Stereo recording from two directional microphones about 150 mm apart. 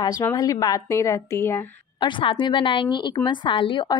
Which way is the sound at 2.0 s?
35° left (ahead or behind).